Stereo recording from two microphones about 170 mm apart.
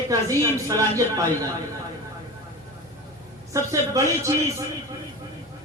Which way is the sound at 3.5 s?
20° right (ahead or behind).